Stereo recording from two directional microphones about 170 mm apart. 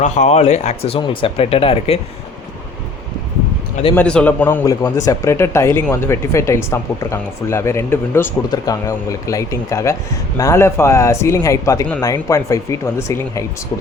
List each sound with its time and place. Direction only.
0.0 s speech: 40° left (ahead or behind)
3.9 s speech: 5° left (ahead or behind)